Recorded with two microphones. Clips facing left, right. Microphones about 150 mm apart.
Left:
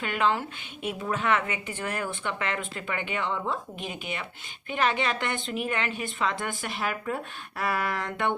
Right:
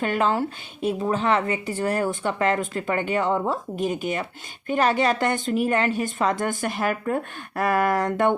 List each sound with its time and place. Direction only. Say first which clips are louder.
0.0 s a woman's voice: right 4 dB; 40° right (ahead or behind)